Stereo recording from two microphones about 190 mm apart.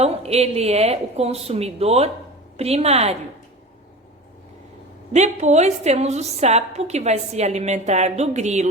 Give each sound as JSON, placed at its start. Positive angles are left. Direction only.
{"t": 0.0, "sound": "a woman's voice", "side_deg": -35}
{"t": 5.1, "sound": "a woman's voice", "side_deg": -35}